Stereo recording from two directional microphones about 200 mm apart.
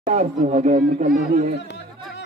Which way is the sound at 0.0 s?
40° right (ahead or behind).